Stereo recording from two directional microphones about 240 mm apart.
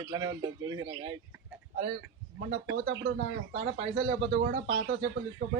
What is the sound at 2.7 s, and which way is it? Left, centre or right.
Speech, right.